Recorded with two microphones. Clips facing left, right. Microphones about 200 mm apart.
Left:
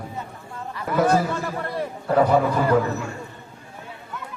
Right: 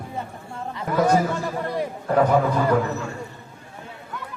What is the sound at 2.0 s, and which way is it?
Speech, 10° left (ahead or behind).